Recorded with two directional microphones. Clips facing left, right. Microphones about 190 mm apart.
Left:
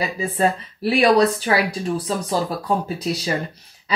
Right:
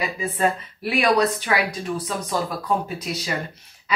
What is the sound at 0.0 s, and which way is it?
A woman's voice, 30° left (ahead or behind).